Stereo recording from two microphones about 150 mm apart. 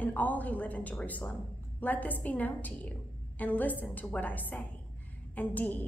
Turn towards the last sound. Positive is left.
turn(degrees=10)  # may be behind; listen again after turning